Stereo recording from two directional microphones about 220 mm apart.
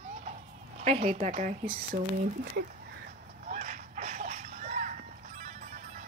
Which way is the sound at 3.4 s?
35° right (ahead or behind).